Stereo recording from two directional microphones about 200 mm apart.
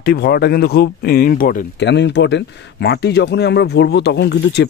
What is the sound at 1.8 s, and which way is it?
Speech, 60° left (ahead or behind).